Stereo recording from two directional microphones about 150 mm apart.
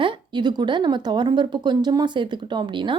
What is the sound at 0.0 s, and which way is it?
Speech, 35° right (ahead or behind).